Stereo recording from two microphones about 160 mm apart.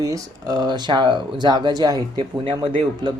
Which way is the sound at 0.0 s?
25° right (ahead or behind).